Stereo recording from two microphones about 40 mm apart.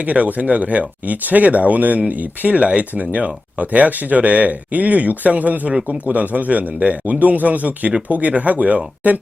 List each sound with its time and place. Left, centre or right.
0.0 s speech: right